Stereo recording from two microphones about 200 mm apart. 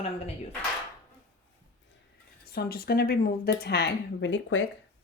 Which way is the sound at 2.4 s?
50° left (ahead or behind).